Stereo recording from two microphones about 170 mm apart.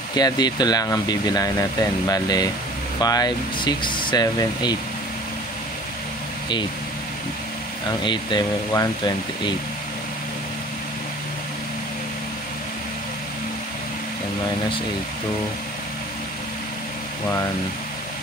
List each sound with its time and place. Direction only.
0.1 s speech: 25° left (ahead or behind)
8.0 s speech: 25° left (ahead or behind)